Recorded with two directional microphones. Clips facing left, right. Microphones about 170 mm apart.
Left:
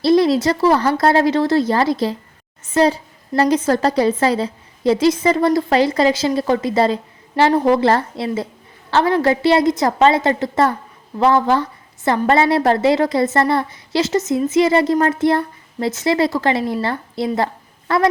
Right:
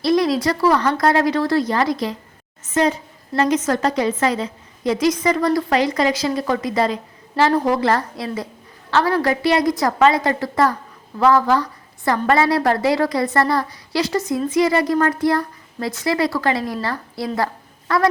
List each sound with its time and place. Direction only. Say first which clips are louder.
0.0 s a woman's voice: left 3 dB; 30° left (ahead or behind)